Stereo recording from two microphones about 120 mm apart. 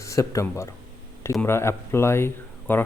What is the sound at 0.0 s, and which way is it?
Speech, 25° left (ahead or behind).